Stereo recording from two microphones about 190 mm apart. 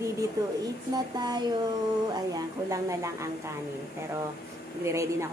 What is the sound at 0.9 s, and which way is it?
A woman's voice, 20° right (ahead or behind).